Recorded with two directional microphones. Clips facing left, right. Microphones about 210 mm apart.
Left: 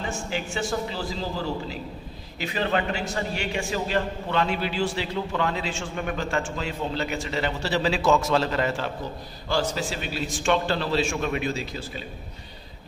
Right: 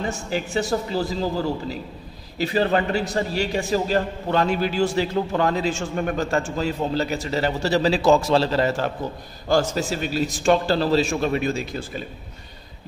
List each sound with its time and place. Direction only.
0.1 s a man's voice: 40° right (ahead or behind)
2.3 s a man's voice: 35° right (ahead or behind)